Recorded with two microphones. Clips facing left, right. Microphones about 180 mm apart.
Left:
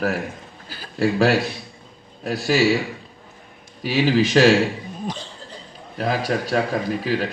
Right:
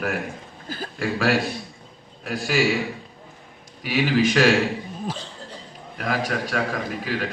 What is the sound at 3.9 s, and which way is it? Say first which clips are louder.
Speech: left 2 dB; 35° left (ahead or behind).